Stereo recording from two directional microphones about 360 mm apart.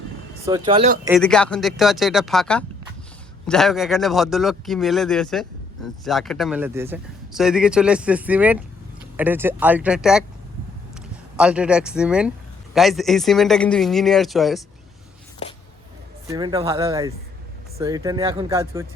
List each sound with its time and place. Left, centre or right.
0.4 s speech: centre
1.0 s a man's voice: centre
16.2 s speech: centre